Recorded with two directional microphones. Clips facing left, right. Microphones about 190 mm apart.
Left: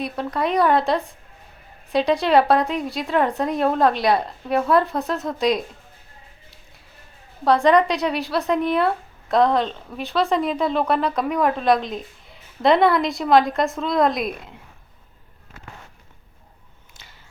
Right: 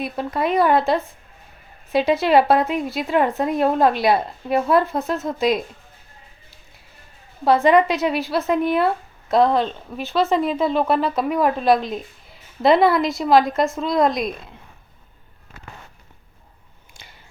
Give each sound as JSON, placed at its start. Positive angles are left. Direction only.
{"t": 0.0, "sound": "speech", "side_deg": 0}
{"t": 7.4, "sound": "speech", "side_deg": -5}